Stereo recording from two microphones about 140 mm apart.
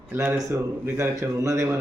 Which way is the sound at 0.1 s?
15° right (ahead or behind).